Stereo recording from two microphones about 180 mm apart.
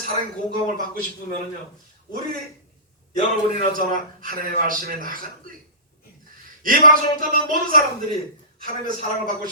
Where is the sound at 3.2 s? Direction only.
40° left (ahead or behind).